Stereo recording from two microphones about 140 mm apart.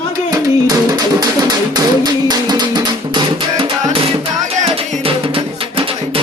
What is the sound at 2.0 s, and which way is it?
Music, 30° right (ahead or behind).